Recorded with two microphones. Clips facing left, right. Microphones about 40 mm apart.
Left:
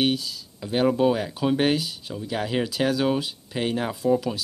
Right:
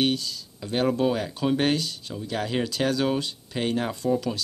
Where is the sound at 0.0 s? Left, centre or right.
Centre.